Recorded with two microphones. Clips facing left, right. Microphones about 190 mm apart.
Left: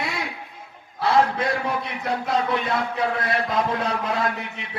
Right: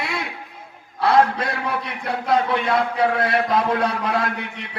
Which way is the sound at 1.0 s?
60° right (ahead or behind).